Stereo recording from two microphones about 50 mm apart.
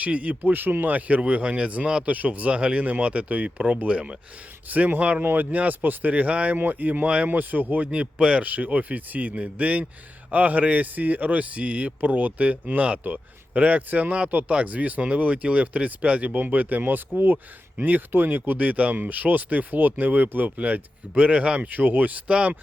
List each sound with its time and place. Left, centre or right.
0.0 s speech: right
4.7 s speech: right
5.2 s speech: right
6.6 s speech: right
7.9 s speech: right
8.4 s speech: right